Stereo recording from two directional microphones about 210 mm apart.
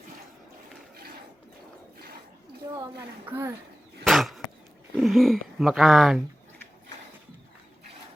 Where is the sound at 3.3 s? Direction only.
10° right (ahead or behind).